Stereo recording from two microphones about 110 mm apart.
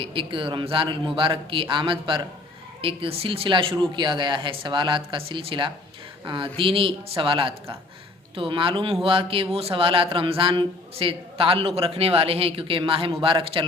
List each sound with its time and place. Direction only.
0.0 s speech: 50° right (ahead or behind)
2.8 s a man's voice: 60° right (ahead or behind)